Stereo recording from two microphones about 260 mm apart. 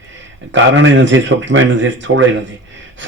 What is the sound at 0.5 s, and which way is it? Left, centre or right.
A man's voice, right.